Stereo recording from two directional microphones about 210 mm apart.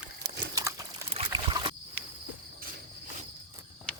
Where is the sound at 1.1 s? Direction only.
25° right (ahead or behind).